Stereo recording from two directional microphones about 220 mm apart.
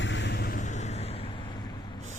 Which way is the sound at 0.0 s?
55° left (ahead or behind).